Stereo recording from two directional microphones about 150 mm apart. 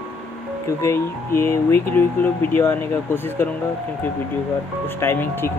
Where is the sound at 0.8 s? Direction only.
15° left (ahead or behind).